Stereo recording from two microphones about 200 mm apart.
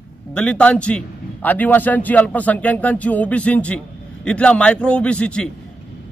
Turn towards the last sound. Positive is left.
turn(degrees=5)  # may be behind; listen again after turning